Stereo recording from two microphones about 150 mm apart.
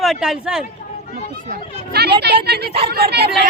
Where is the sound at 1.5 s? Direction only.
90° right.